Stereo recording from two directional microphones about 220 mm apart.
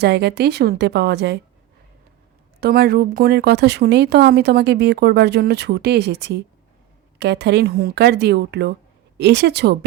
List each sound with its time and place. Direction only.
0.0 s speech: 50° right (ahead or behind)
2.6 s speech: 45° right (ahead or behind)